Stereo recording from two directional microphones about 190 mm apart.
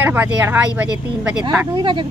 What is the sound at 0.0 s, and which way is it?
A woman's voice, 10° right (ahead or behind).